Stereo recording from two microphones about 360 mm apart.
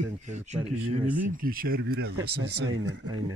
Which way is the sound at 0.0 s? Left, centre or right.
Centre.